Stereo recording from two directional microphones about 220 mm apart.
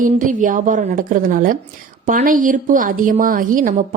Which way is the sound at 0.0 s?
35° right (ahead or behind).